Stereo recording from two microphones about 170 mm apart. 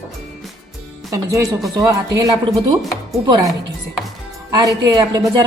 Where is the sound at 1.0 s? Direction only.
20° right (ahead or behind).